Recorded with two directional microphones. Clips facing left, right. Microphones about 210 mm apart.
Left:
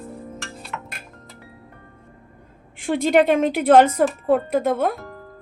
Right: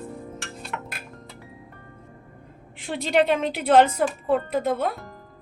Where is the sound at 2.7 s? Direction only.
50° left (ahead or behind).